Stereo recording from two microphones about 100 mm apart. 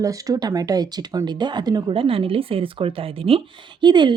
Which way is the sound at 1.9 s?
60° right (ahead or behind).